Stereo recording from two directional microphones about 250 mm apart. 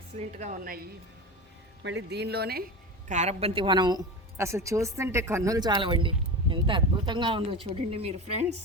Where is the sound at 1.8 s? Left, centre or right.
Right.